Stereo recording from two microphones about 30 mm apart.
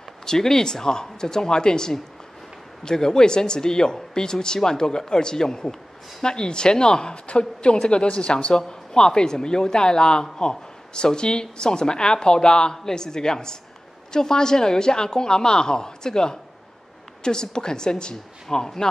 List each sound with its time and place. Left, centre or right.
0.2 s a woman's voice: centre